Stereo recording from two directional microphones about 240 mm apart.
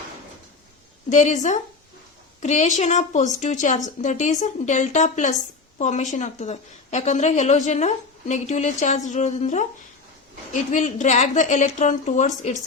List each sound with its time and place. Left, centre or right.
1.1 s a woman's voice: left